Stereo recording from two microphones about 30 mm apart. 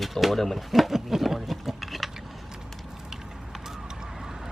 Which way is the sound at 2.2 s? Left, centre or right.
Centre.